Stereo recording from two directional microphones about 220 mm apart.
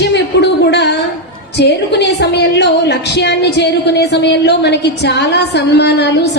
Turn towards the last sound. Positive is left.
turn(degrees=50)  # may be behind; listen again after turning